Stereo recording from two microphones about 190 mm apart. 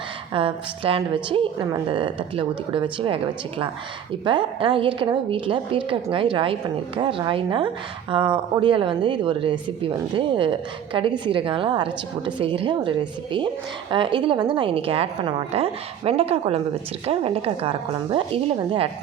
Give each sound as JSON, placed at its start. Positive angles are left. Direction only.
{"t": 0.3, "sound": "a woman's voice", "side_deg": -30}